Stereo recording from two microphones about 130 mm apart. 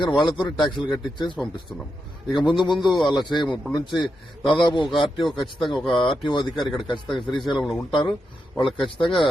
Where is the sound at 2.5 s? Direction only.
35° left (ahead or behind).